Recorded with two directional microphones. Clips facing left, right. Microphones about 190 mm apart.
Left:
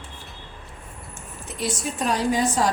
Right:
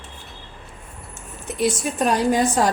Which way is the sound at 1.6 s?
55° right (ahead or behind).